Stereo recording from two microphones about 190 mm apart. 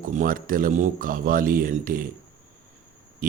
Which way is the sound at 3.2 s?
45° right (ahead or behind).